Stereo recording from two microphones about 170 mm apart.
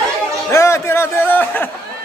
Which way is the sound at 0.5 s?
15° left (ahead or behind).